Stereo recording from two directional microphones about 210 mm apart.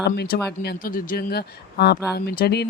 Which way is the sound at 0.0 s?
50° left (ahead or behind).